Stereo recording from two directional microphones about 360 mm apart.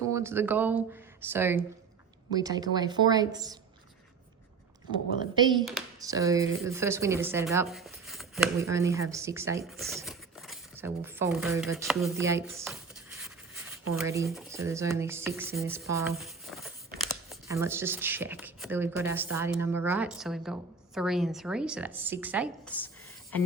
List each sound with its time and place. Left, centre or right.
0.1 s a woman's voice: centre
5.2 s a woman's voice: centre